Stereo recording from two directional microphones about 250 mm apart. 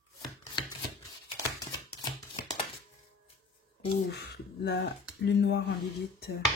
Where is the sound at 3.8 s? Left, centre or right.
Left.